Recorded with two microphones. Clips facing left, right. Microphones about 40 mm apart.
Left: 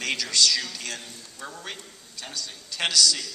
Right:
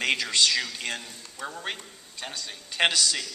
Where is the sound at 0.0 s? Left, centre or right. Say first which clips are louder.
Right 1 dB; right.